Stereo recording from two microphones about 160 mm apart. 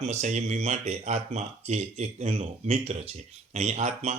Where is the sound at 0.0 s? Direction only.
45° right (ahead or behind).